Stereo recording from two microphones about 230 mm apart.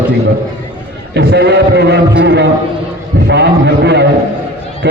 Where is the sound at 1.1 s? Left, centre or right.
Right.